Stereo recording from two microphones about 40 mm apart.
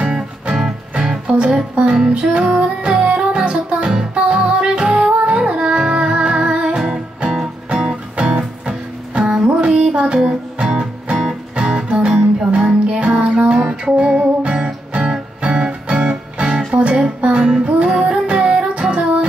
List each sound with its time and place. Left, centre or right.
0.9 s music: centre
7.7 s music: right